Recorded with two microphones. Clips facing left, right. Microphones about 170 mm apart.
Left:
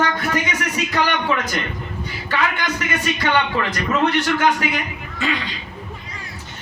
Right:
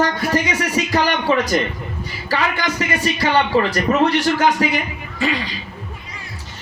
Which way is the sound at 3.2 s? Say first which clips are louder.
Right 5 dB; 35° right (ahead or behind).